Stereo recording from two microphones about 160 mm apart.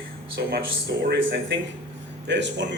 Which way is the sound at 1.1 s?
90° right.